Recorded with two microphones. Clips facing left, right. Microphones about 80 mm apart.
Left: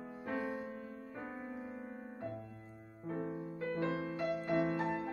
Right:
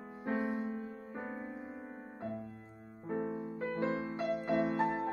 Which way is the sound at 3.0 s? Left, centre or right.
Right.